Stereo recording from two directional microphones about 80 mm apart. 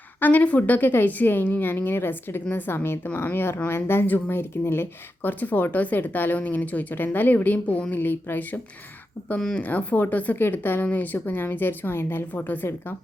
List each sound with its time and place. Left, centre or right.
0.2 s speech: left
9.4 s speech: centre
9.6 s speech: left